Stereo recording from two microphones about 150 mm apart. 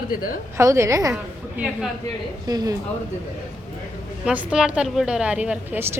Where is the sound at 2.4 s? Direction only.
25° right (ahead or behind).